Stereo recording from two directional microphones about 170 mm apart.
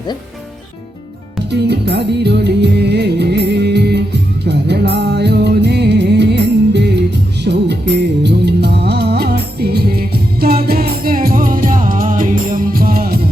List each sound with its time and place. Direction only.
1.5 s music: 80° right; by 13.1 s 60° right (ahead or behind)